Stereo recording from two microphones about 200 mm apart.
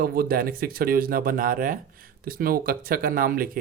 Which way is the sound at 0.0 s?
50° right (ahead or behind).